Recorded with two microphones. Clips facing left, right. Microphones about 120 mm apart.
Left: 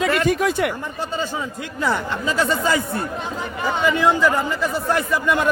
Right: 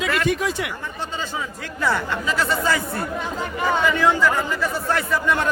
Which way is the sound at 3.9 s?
15° left (ahead or behind).